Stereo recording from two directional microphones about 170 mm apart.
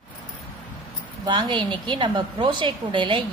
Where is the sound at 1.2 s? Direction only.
25° right (ahead or behind).